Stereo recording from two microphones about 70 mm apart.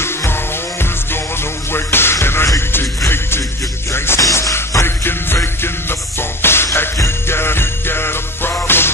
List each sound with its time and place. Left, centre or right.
0.0 s music: left
1.7 s music: left
4.2 s music: left